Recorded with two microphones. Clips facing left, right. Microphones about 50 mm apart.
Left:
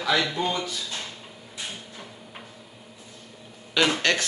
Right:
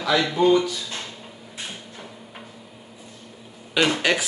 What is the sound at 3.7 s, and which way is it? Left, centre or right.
Speech, centre.